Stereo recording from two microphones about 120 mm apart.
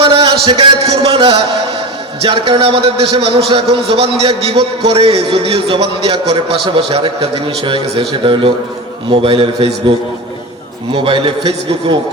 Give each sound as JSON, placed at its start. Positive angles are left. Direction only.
{"t": 0.0, "sound": "a man's voice", "side_deg": -50}
{"t": 10.9, "sound": "a man's voice", "side_deg": -50}